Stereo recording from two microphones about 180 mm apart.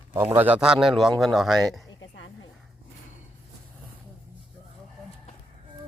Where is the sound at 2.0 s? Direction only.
90° left.